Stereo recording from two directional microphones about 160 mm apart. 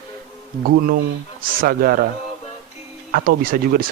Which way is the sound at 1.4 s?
65° right (ahead or behind).